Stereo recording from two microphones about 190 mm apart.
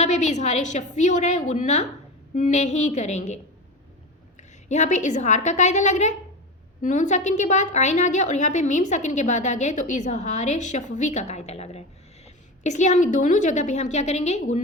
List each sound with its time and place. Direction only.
0.0 s a woman's voice: 35° left (ahead or behind)